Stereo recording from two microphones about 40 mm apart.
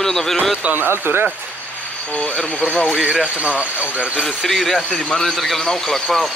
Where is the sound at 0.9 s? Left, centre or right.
Right.